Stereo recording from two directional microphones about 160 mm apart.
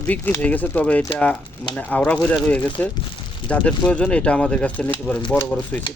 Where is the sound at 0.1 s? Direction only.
10° left (ahead or behind).